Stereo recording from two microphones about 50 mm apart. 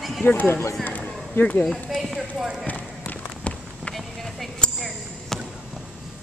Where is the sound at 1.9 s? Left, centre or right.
Centre.